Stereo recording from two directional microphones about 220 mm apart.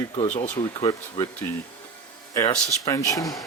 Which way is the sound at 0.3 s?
35° left (ahead or behind).